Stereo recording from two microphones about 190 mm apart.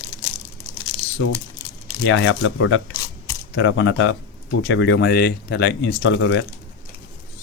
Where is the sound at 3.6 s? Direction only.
75° left (ahead or behind); by 6.5 s 90° left.